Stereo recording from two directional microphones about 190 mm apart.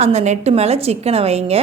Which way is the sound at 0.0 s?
35° right (ahead or behind).